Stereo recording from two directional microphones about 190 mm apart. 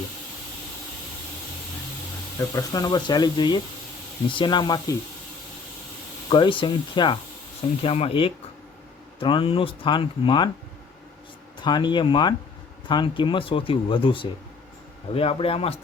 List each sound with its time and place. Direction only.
2.4 s speech: 20° left (ahead or behind)
6.3 s speech: 25° left (ahead or behind)
11.6 s speech: 25° left (ahead or behind)